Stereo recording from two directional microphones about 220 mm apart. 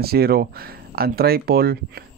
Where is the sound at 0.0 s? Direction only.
45° right (ahead or behind).